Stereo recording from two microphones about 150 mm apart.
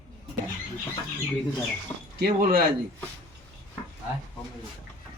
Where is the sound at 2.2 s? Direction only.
75° right (ahead or behind).